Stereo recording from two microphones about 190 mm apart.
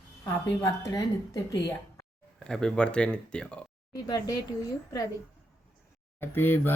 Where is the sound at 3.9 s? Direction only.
20° left (ahead or behind).